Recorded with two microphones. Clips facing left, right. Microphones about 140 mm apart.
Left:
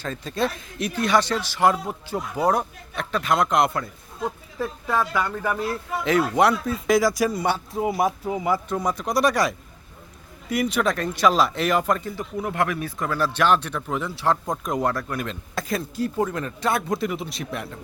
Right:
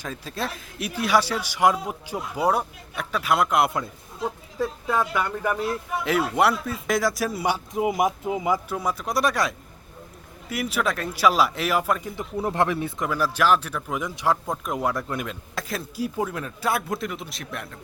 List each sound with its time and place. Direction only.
0.0 s speech: 5° right (ahead or behind)
8.7 s speech: 5° right (ahead or behind)
12.1 s speech: 30° right (ahead or behind)
13.1 s speech: 10° right (ahead or behind)
14.9 s speech: 20° right (ahead or behind)
15.3 s speech: centre (ahead or behind)